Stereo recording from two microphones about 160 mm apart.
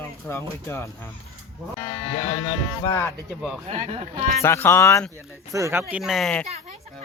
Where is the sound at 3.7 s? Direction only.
45° right (ahead or behind).